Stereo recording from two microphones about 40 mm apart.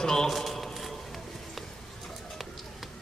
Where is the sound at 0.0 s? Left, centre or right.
Centre.